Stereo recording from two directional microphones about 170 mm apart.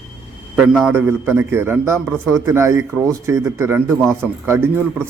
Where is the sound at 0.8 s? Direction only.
10° right (ahead or behind).